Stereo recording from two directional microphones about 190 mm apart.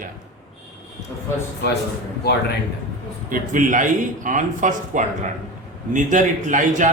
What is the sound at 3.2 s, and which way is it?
A man's voice, 45° right (ahead or behind).